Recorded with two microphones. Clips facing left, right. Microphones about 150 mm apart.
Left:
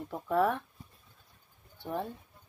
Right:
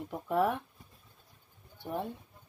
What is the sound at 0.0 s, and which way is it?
Speech, 10° right (ahead or behind).